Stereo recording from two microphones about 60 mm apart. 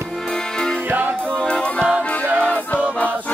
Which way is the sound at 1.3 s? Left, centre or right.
Centre.